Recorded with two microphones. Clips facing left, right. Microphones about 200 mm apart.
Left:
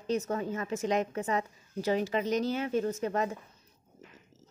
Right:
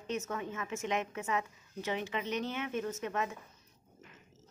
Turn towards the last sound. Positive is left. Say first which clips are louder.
# left 5 dB
turn(degrees=35)  # may be behind; listen again after turning